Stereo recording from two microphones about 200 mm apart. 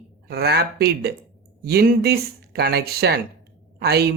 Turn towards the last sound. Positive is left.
turn(degrees=-55)  # may be behind; listen again after turning